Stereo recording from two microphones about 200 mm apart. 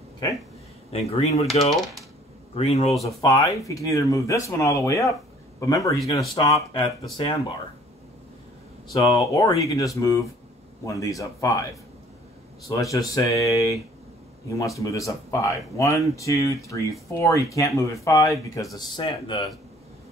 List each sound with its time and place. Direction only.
0.9 s speech: 30° left (ahead or behind)
1.7 s speech: centre (ahead or behind)
2.5 s speech: 30° left (ahead or behind)
3.0 s speech: 15° left (ahead or behind)
8.9 s speech: 15° left (ahead or behind)
12.6 s speech: 15° left (ahead or behind)